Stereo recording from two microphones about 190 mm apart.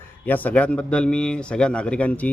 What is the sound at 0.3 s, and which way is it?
A man's voice, 10° left (ahead or behind).